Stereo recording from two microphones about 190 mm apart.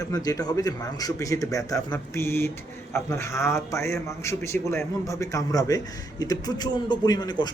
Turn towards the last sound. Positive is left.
turn(degrees=20)  # may be behind; listen again after turning